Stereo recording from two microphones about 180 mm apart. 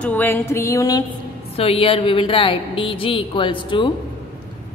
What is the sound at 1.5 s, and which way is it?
A woman's voice, 35° left (ahead or behind).